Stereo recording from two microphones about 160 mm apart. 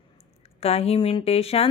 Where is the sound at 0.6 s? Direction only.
40° left (ahead or behind).